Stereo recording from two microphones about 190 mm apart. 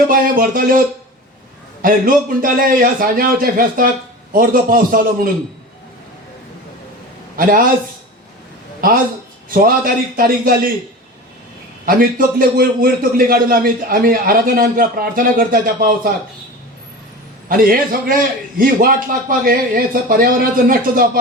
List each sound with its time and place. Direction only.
0.1 s speech: 45° right (ahead or behind)
1.8 s a man's voice: 45° right (ahead or behind)
7.3 s a man's voice: 50° right (ahead or behind)
9.5 s a man's voice: 50° right (ahead or behind)
11.9 s a man's voice: 50° right (ahead or behind)
17.6 s a man's voice: 50° right (ahead or behind)